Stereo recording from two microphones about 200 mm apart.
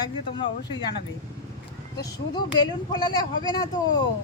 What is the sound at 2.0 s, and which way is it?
Speech, 20° left (ahead or behind).